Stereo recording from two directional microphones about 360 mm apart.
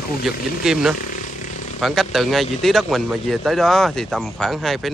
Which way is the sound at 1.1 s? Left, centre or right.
Left.